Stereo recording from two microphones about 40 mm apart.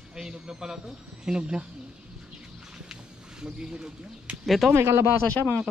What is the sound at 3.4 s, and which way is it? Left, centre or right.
Speech, centre.